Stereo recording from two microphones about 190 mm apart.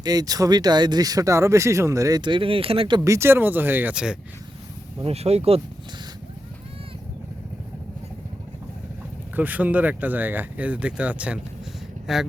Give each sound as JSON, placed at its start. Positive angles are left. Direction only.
{"t": 0.0, "sound": "speech", "side_deg": -20}
{"t": 5.0, "sound": "speech", "side_deg": -35}
{"t": 9.3, "sound": "speech", "side_deg": -10}